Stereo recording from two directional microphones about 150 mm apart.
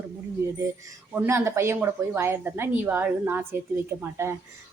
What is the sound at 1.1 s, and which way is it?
Speech, 15° right (ahead or behind).